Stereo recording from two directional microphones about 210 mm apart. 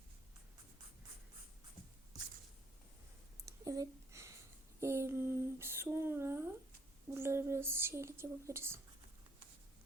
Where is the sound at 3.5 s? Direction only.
15° right (ahead or behind).